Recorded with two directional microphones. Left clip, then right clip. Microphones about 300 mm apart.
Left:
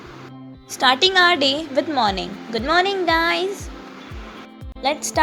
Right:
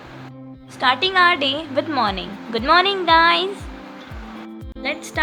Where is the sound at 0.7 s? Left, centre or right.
Centre.